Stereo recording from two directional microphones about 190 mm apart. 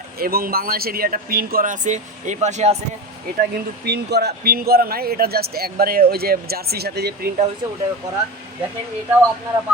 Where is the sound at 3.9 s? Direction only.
60° right (ahead or behind).